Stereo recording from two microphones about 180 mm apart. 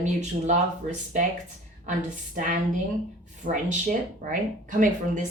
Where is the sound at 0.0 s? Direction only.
40° right (ahead or behind).